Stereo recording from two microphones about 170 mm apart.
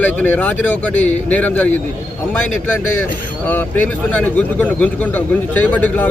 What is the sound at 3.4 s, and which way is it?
A man's voice, 10° left (ahead or behind).